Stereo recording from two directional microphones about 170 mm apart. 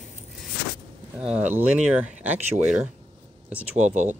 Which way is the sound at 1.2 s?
5° right (ahead or behind).